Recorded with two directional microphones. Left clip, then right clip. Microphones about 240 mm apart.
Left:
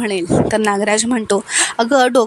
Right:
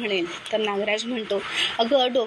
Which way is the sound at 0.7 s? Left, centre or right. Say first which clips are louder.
Left 9 dB; left.